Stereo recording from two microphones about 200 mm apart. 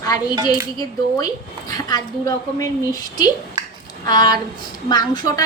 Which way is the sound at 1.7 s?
20° left (ahead or behind).